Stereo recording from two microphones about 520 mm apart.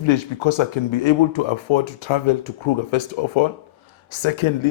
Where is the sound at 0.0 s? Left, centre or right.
Left.